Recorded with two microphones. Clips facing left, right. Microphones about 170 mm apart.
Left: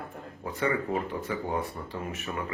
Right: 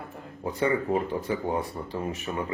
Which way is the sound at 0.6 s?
30° right (ahead or behind).